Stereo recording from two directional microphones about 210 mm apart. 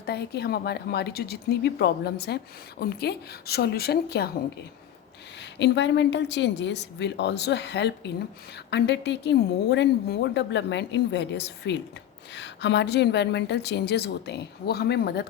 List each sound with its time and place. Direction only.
0.0 s a woman's voice: 50° left (ahead or behind)
5.4 s a woman's voice: 55° left (ahead or behind)